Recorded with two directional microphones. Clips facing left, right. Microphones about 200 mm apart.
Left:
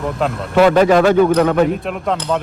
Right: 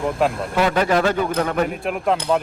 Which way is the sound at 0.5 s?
90° left.